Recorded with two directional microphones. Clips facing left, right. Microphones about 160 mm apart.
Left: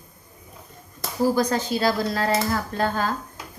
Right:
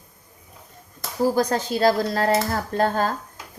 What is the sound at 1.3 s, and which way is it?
Speech, 45° right (ahead or behind).